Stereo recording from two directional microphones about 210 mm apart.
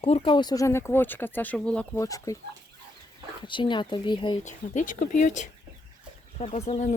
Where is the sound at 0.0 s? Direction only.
25° left (ahead or behind).